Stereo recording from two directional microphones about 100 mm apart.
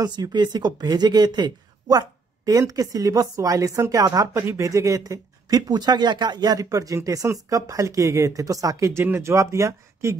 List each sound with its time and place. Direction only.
0.0 s speech: 45° right (ahead or behind); by 10.1 s 30° right (ahead or behind)